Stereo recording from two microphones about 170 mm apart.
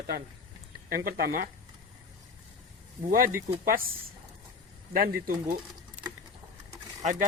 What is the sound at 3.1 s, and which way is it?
Speech, 55° right (ahead or behind).